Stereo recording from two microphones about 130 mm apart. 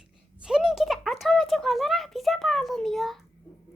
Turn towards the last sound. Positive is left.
turn(degrees=0)  # may be behind; listen again after turning